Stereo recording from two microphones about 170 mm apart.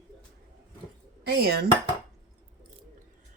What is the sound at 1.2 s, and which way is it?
Dishes, 70° right (ahead or behind).